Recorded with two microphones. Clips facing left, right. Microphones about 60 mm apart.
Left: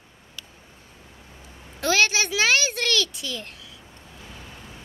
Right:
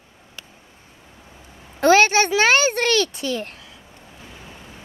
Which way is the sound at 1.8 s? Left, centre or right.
Right.